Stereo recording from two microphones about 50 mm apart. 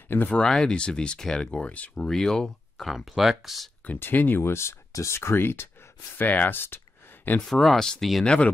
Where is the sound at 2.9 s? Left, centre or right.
Centre.